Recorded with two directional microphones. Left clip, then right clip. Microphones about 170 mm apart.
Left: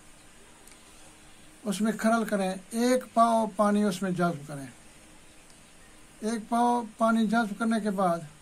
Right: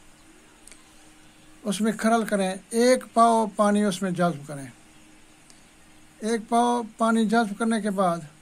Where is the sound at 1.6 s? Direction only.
45° right (ahead or behind).